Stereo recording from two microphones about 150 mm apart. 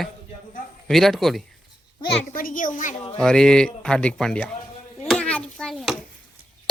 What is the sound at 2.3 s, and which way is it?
Speech, 65° left (ahead or behind).